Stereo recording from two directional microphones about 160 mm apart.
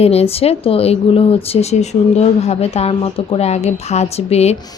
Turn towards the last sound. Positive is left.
turn(degrees=40)  # may be behind; listen again after turning